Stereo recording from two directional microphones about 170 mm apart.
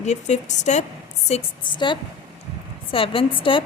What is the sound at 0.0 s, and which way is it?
Speech, 45° left (ahead or behind).